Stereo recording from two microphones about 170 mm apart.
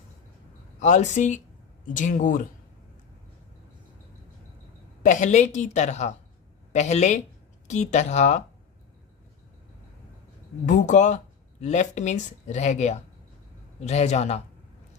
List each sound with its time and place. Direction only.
0.8 s speech: 45° left (ahead or behind)
5.0 s speech: 45° left (ahead or behind)
10.7 s a man's voice: 45° left (ahead or behind)